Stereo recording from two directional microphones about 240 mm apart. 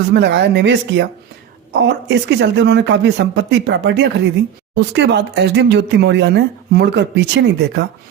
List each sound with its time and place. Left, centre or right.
0.1 s speech: right